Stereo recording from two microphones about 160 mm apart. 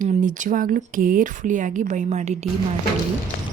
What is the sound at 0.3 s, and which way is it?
Speech, 55° right (ahead or behind).